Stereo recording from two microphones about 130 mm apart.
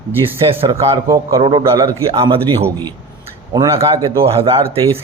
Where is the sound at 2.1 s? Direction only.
50° right (ahead or behind).